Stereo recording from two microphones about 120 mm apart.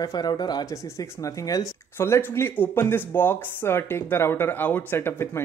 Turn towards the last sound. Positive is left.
turn(degrees=20)  # may be behind; listen again after turning